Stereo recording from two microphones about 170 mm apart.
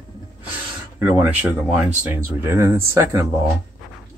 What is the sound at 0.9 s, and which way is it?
Speech, 15° right (ahead or behind).